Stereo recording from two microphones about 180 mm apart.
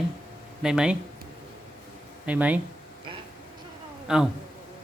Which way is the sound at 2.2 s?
10° right (ahead or behind).